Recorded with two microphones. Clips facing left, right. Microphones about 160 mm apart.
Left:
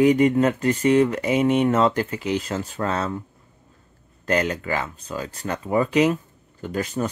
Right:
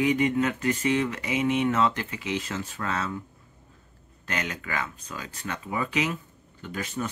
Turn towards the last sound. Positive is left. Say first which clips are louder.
# left 7 dB
turn(degrees=40)  # may be behind; listen again after turning